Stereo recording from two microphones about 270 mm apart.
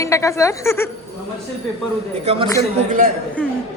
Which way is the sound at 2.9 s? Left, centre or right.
Right.